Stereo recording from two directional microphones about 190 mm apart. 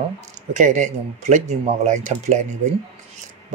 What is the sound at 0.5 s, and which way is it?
Speech, 40° right (ahead or behind).